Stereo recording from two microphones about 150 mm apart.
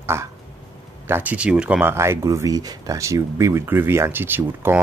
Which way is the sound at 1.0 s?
15° right (ahead or behind).